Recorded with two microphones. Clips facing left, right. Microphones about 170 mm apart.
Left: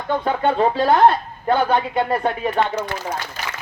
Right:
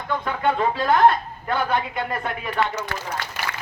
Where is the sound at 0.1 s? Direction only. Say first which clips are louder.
Left 4 dB; 30° left (ahead or behind).